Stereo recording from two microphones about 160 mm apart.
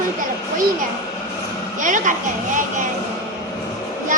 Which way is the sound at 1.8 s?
55° right (ahead or behind).